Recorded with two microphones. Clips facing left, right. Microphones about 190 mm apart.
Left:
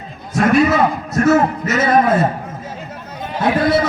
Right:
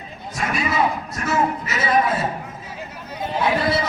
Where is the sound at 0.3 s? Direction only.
55° left (ahead or behind).